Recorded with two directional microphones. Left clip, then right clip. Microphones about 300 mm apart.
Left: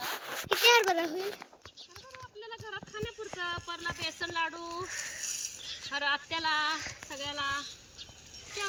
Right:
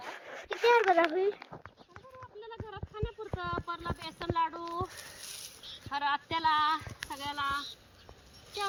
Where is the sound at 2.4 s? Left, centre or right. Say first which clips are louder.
Left 3 dB; centre.